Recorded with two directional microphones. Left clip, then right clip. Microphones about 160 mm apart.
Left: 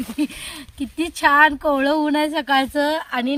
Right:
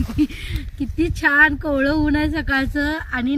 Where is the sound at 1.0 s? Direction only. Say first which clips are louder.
Left 1 dB; 70° left (ahead or behind).